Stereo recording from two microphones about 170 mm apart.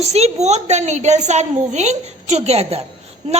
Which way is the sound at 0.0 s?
40° right (ahead or behind).